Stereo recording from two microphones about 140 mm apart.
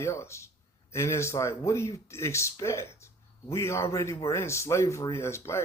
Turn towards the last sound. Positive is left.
turn(degrees=20)  # may be behind; listen again after turning